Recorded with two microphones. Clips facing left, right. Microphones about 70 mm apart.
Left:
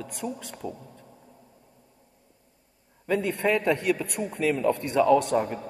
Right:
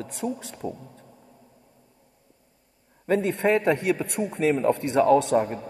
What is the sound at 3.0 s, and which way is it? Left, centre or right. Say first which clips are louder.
A man's voice: right 3 dB; right.